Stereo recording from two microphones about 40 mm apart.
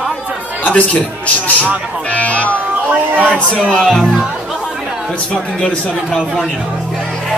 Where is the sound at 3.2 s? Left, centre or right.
Left.